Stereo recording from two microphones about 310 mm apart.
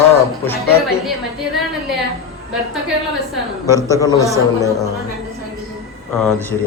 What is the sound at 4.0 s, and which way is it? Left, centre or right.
Speech, centre.